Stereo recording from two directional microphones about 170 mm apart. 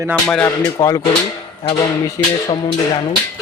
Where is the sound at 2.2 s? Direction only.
20° left (ahead or behind).